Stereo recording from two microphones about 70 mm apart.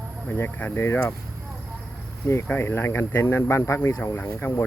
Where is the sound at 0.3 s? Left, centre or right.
Left.